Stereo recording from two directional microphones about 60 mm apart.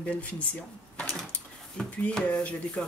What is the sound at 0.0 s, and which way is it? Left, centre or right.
Speech, left.